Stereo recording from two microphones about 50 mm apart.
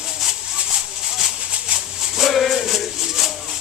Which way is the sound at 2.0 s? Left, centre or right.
Centre.